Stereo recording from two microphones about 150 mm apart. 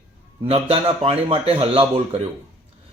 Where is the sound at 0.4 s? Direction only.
35° right (ahead or behind).